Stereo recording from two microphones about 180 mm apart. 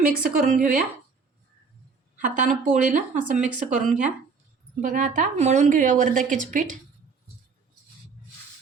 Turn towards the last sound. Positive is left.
turn(degrees=-45)  # may be behind; listen again after turning